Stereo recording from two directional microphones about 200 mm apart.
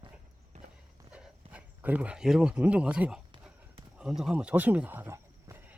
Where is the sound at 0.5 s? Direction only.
35° right (ahead or behind).